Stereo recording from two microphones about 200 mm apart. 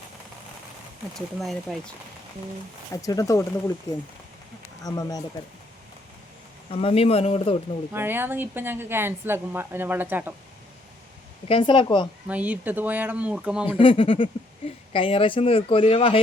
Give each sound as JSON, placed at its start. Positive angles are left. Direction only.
{"t": 1.1, "sound": "speech", "side_deg": 0}
{"t": 2.9, "sound": "speech", "side_deg": 15}
{"t": 4.8, "sound": "speech", "side_deg": 20}
{"t": 6.7, "sound": "speech", "side_deg": 30}
{"t": 7.9, "sound": "speech", "side_deg": -10}
{"t": 11.4, "sound": "speech", "side_deg": 25}
{"t": 12.3, "sound": "speech", "side_deg": -5}
{"t": 13.7, "sound": "speech", "side_deg": 25}